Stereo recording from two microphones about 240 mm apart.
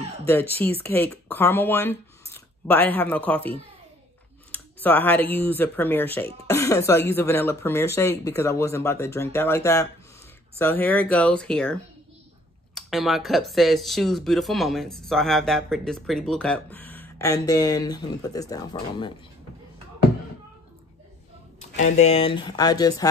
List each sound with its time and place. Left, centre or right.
0.3 s speech: centre
21.7 s speech: left